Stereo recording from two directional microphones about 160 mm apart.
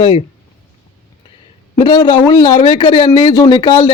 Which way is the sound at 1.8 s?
30° left (ahead or behind).